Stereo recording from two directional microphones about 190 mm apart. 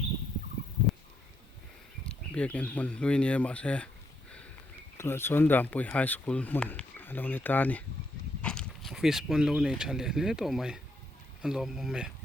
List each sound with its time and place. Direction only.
2.0 s speech: 5° left (ahead or behind)
4.9 s speech: 10° left (ahead or behind)